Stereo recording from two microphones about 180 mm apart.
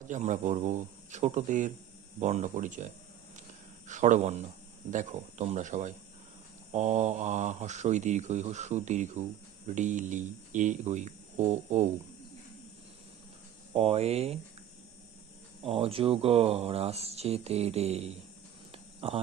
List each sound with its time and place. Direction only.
0.1 s speech: 45° right (ahead or behind)
13.7 s speech: 35° right (ahead or behind)
15.6 s speech: 30° right (ahead or behind)
18.7 s cricket: 35° right (ahead or behind)